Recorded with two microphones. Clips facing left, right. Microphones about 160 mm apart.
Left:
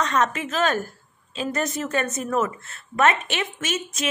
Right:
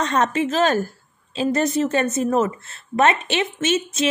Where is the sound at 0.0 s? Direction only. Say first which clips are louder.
Right 3 dB; 30° right (ahead or behind).